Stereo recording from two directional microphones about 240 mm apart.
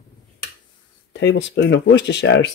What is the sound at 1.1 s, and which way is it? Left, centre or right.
Speech, left.